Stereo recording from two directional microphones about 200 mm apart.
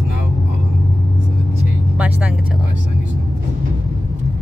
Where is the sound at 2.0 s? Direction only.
5° right (ahead or behind).